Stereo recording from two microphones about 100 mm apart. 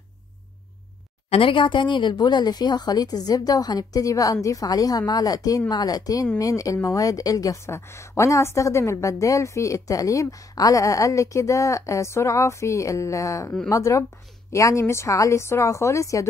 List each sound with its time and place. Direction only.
1.3 s a woman's voice: 60° left (ahead or behind); by 16.3 s 30° left (ahead or behind)